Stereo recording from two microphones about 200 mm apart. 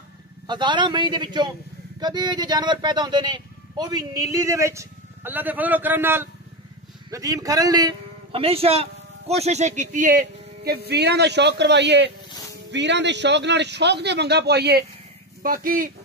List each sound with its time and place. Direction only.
0.5 s a man's voice: 20° right (ahead or behind); by 15.9 s 45° right (ahead or behind)